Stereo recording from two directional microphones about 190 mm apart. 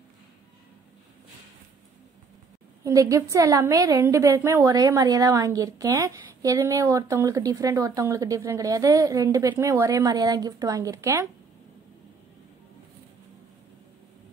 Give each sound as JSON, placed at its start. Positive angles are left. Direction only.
{"t": 2.8, "sound": "a woman's voice", "side_deg": -15}